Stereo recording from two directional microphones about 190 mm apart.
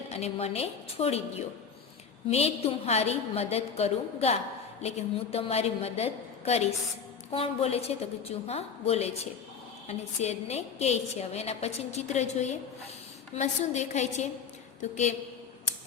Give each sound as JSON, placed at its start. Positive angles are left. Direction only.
{"t": 0.1, "sound": "a woman's voice", "side_deg": 35}